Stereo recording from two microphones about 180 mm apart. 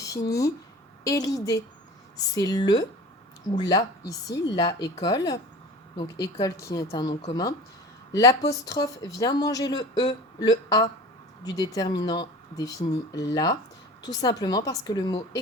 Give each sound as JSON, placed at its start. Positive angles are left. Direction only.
{"t": 1.0, "sound": "speech", "side_deg": 20}